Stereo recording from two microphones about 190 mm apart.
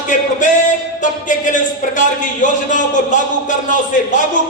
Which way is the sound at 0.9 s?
40° left (ahead or behind).